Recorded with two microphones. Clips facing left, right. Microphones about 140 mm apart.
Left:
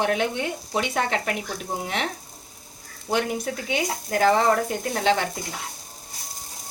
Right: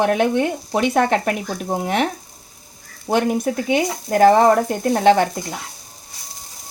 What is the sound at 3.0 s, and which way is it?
Speech, 50° right (ahead or behind).